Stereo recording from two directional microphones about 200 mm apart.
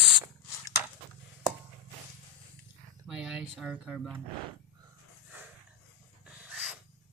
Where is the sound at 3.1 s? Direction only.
5° right (ahead or behind).